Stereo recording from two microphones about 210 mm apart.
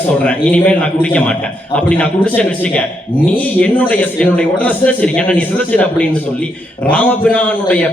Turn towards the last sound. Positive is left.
turn(degrees=5)  # may be behind; listen again after turning